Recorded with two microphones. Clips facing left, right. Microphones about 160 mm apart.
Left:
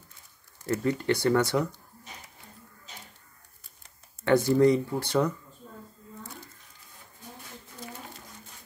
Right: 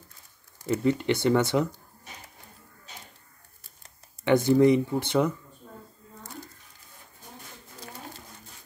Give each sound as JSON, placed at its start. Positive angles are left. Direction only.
{"t": 0.7, "sound": "speech", "side_deg": -20}
{"t": 4.2, "sound": "speech", "side_deg": -15}